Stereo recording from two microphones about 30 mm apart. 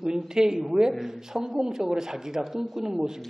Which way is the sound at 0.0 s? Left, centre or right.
Centre.